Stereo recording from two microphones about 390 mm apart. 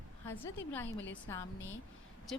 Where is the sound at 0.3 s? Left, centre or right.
Centre.